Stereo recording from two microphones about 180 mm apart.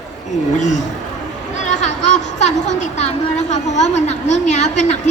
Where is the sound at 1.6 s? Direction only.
40° left (ahead or behind).